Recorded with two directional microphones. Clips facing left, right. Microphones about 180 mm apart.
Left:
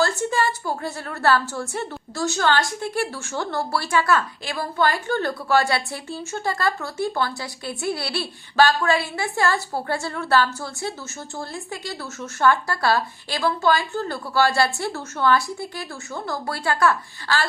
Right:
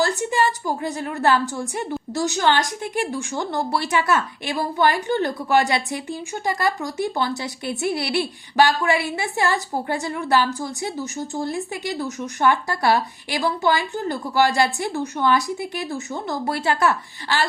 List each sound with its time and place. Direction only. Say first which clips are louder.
0.2 s a woman's voice: right 2 dB; 20° right (ahead or behind)